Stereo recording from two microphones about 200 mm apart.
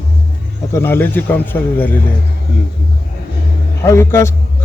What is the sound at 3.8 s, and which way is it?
Speech, 10° left (ahead or behind).